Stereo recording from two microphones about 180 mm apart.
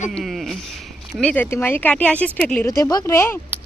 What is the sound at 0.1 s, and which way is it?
Speech, centre (ahead or behind).